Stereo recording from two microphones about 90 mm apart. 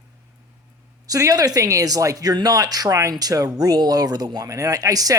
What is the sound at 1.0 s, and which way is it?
Speech, 40° right (ahead or behind).